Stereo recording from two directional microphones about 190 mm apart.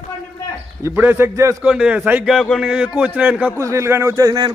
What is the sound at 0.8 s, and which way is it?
A man's voice, 10° right (ahead or behind).